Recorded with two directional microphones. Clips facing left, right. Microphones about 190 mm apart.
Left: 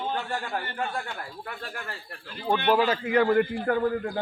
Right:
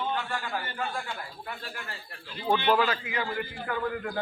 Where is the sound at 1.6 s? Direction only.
50° left (ahead or behind).